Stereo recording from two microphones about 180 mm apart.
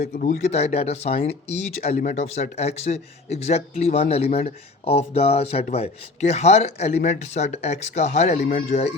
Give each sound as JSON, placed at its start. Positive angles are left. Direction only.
{"t": 0.0, "sound": "speech", "side_deg": 45}
{"t": 8.4, "sound": "speech", "side_deg": 50}